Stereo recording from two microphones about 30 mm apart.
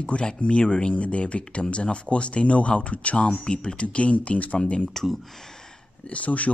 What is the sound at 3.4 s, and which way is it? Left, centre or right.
Speech, left.